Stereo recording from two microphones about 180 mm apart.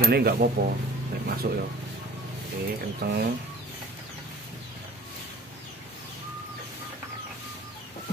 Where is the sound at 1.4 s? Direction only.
70° right (ahead or behind).